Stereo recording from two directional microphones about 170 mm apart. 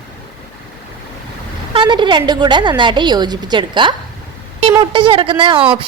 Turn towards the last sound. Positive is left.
turn(degrees=-30)  # may be behind; listen again after turning